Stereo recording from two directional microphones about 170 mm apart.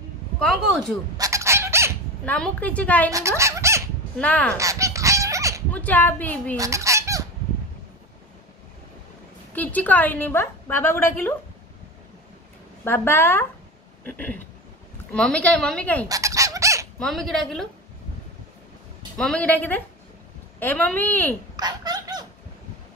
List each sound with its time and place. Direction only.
0.4 s a woman's voice: centre (ahead or behind)
1.1 s fowl: 20° right (ahead or behind)
2.2 s a woman's voice: 10° left (ahead or behind)
3.1 s fowl: 20° right (ahead or behind)
4.2 s a woman's voice: 10° left (ahead or behind)
4.6 s goose: 20° right (ahead or behind)
5.7 s a woman's voice: 10° left (ahead or behind)
6.5 s fowl: 20° right (ahead or behind)
9.5 s a woman's voice: 10° left (ahead or behind)
12.8 s a woman's voice: 15° left (ahead or behind)
16.1 s fowl: 20° right (ahead or behind)
17.0 s a woman's voice: centre (ahead or behind)
19.1 s a woman's voice: 5° left (ahead or behind)
21.5 s a sound: 25° right (ahead or behind)